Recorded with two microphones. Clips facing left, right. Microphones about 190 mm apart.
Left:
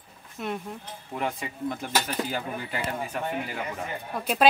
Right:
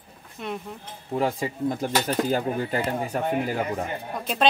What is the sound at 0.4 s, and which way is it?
Speech, centre (ahead or behind).